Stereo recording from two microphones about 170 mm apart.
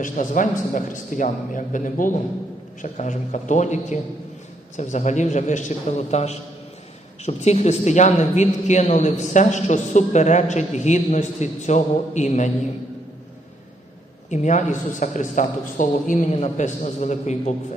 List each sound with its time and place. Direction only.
0.0 s a man's voice: 50° left (ahead or behind)
14.3 s a man's voice: 45° left (ahead or behind)